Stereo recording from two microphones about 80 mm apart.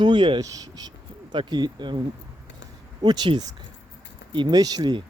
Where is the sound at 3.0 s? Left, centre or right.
Right.